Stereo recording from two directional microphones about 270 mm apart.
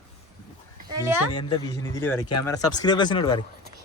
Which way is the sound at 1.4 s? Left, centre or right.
Centre.